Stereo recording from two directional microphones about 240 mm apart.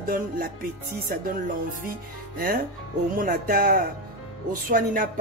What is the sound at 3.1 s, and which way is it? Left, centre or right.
Speech, right.